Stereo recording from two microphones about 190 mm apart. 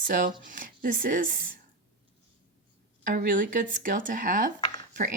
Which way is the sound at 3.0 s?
45° right (ahead or behind).